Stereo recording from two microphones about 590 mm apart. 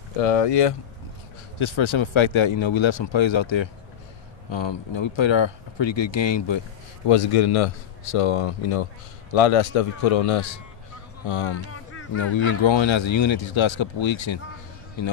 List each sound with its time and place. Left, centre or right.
0.2 s speech: left
1.6 s speech: left
7.1 s a man's voice: left
11.2 s a man's voice: left